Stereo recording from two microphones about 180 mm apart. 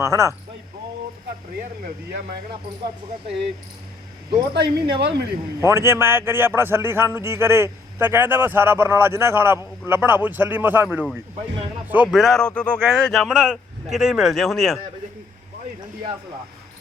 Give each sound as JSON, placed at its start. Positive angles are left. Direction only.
{"t": 0.0, "sound": "a man's voice", "side_deg": -15}
{"t": 4.5, "sound": "speech", "side_deg": -65}
{"t": 5.5, "sound": "a man's voice", "side_deg": -15}